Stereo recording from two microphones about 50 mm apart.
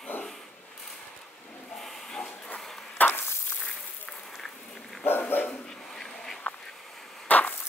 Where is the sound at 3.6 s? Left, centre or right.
Centre.